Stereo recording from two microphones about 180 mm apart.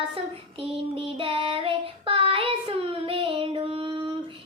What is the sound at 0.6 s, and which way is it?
Child singing, 30° right (ahead or behind).